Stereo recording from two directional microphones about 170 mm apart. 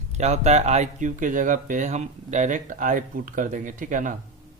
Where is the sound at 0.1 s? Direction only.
40° right (ahead or behind).